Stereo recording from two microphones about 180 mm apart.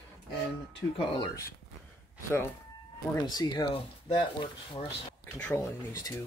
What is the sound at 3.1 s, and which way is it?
Speech, 25° left (ahead or behind).